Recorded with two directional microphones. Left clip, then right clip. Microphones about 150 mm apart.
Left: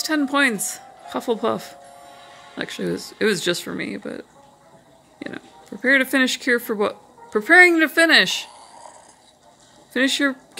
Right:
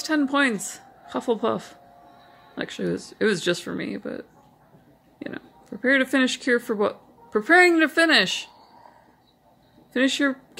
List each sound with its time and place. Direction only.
0.0 s speech: 10° left (ahead or behind)
2.0 s music: 35° left (ahead or behind)
2.5 s speech: 10° left (ahead or behind)
9.9 s speech: 10° left (ahead or behind)